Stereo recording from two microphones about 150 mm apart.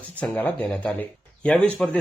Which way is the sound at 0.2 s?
10° left (ahead or behind).